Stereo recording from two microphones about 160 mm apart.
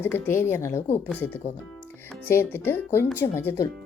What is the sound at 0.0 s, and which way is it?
A woman's voice, 15° left (ahead or behind).